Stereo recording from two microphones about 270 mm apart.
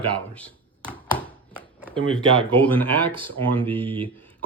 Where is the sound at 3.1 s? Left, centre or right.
Centre.